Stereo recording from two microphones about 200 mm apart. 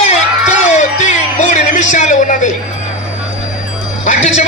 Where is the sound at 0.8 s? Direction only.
35° left (ahead or behind).